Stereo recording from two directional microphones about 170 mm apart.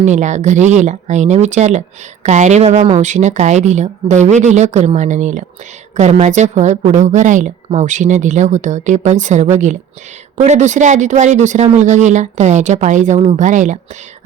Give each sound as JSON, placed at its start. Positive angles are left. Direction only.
{"t": 0.0, "sound": "a woman's voice", "side_deg": -45}